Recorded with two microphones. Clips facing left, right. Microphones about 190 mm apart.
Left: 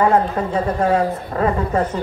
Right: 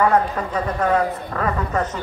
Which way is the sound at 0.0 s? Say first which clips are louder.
Left 2 dB; 25° left (ahead or behind).